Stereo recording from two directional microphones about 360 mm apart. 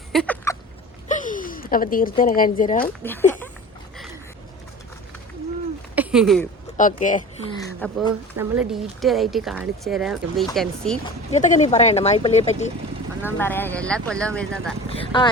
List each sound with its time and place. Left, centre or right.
0.1 s a sound: centre
1.0 s speech: left
3.0 s speech: centre
6.0 s speech: centre
6.7 s speech: left
7.6 s speech: centre
11.0 s speech: centre
13.2 s speech: centre
14.9 s speech: centre